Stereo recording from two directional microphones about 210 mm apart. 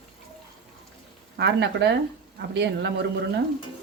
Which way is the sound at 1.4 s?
55° right (ahead or behind).